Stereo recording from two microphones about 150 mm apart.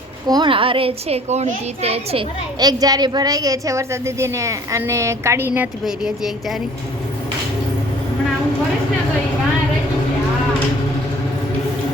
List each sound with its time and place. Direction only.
0.3 s a child's voice: 30° right (ahead or behind)
2.6 s a woman's voice: 25° right (ahead or behind)
5.8 s speech: centre (ahead or behind)